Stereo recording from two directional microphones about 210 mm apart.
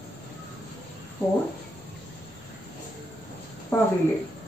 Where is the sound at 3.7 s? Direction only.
10° left (ahead or behind).